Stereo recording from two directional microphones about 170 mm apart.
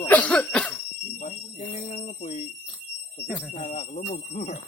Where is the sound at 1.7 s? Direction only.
45° left (ahead or behind).